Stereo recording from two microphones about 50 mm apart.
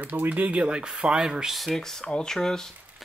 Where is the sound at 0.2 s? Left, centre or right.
Right.